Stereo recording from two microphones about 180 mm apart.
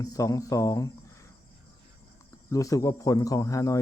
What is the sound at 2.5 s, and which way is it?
Speech, 20° left (ahead or behind).